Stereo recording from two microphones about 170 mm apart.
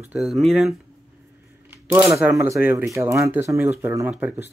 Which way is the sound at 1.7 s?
15° right (ahead or behind).